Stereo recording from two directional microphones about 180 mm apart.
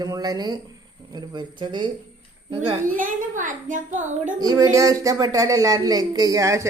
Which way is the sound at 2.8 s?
45° right (ahead or behind).